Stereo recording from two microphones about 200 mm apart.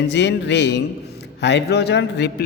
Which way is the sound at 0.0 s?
60° left (ahead or behind).